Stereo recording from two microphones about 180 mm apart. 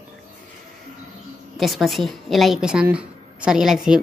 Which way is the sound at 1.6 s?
Centre (ahead or behind).